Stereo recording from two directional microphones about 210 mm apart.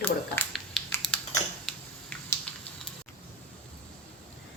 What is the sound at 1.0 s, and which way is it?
Typing, centre (ahead or behind).